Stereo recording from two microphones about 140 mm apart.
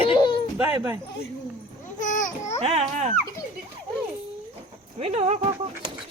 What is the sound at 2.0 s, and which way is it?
Speech, 65° left (ahead or behind).